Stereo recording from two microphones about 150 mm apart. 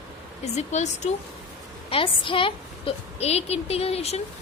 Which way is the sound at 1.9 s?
35° left (ahead or behind).